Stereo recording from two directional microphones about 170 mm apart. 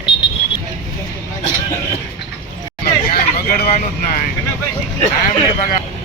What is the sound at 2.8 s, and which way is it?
Vehicle, 65° left (ahead or behind).